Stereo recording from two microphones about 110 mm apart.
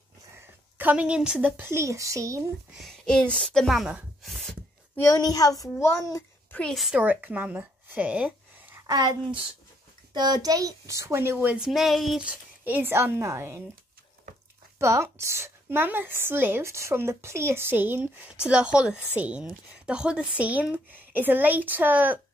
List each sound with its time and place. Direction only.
0.7 s speech: 15° right (ahead or behind)
1.6 s a woman's voice: 25° right (ahead or behind)
2.8 s speech: 5° left (ahead or behind)
5.1 s a child's voice: 35° left (ahead or behind)
6.7 s speech: centre (ahead or behind)
7.0 s speech: 15° right (ahead or behind)
8.7 s a sound: 35° right (ahead or behind)
10.1 s a woman's voice: 40° right (ahead or behind); by 11.5 s 20° right (ahead or behind)
11.5 s speech: 5° right (ahead or behind)
12.2 s a woman's voice: 15° right (ahead or behind)
14.8 s a woman's voice: 25° right (ahead or behind)